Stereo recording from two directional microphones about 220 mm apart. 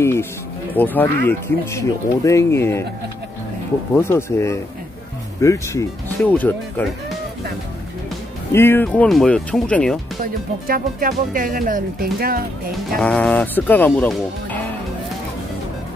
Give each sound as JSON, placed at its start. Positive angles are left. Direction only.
{"t": 0.0, "sound": "speech", "side_deg": 10}
{"t": 3.9, "sound": "speech", "side_deg": 10}
{"t": 8.5, "sound": "speech", "side_deg": 10}
{"t": 10.2, "sound": "speech", "side_deg": -40}
{"t": 12.9, "sound": "speech", "side_deg": 5}